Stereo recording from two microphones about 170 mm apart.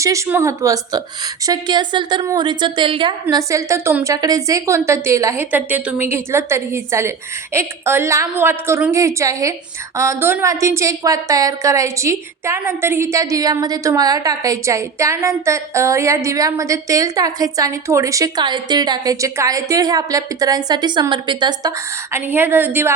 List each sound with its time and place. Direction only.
0.0 s a woman's voice: 15° right (ahead or behind)
22.1 s a woman's voice: 10° right (ahead or behind)